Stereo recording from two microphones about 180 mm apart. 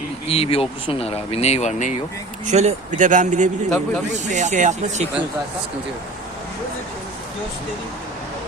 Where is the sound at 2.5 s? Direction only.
40° right (ahead or behind).